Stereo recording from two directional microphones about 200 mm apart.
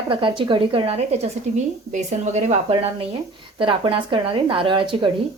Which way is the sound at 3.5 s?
25° right (ahead or behind).